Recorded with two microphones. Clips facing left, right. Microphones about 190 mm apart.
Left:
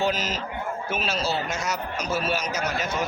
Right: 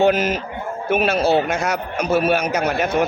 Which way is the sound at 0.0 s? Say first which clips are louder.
Right 9 dB; 60° right (ahead or behind).